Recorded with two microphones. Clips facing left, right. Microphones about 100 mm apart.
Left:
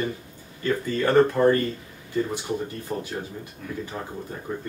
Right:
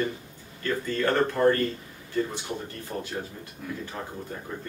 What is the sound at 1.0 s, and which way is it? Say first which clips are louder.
Speech: left 5 dB; 10° left (ahead or behind).